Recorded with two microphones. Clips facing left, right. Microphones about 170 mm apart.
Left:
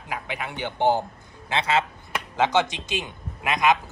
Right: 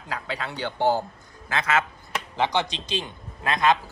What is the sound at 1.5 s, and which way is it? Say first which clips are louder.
A man's voice: left 1 dB; 30° left (ahead or behind).